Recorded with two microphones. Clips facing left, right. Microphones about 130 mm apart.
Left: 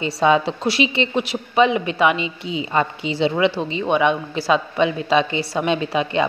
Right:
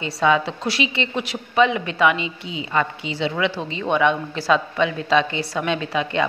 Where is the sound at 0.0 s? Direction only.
25° left (ahead or behind).